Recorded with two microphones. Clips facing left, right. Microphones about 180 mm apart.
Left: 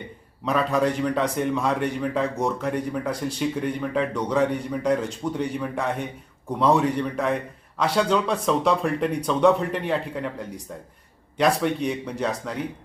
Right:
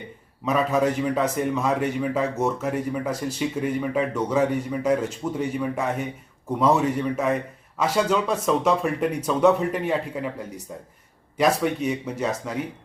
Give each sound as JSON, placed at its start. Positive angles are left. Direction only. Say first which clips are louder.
{"t": 0.4, "sound": "a man's voice", "louder": "right 1 dB", "side_deg": -5}
{"t": 11.3, "sound": "a man's voice", "louder": "even", "side_deg": -5}